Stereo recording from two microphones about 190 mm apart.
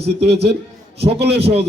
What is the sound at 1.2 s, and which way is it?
Speech, 60° right (ahead or behind).